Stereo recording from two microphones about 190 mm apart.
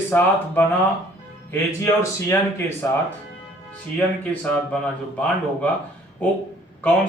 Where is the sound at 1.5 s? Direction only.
15° left (ahead or behind).